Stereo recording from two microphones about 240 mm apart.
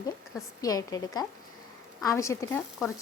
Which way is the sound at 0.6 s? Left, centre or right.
Centre.